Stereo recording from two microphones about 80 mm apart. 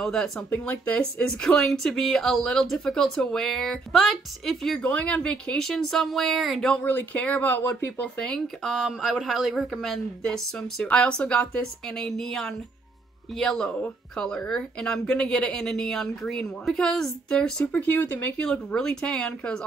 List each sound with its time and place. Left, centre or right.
0.0 s speech: centre
0.5 s speech: centre
7.2 s speech: centre
8.7 s speech: centre; by 18.3 s left
18.4 s speech: centre